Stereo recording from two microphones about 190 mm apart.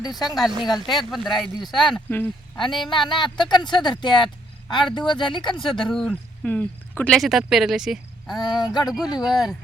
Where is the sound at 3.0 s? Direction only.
25° left (ahead or behind).